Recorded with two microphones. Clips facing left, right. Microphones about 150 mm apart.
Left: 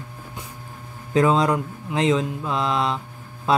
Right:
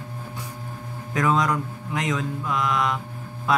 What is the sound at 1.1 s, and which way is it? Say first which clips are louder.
Mantra: left 4 dB; 30° left (ahead or behind).